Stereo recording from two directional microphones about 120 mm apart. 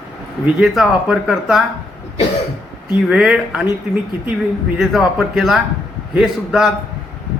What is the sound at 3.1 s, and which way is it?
Speech, 5° right (ahead or behind).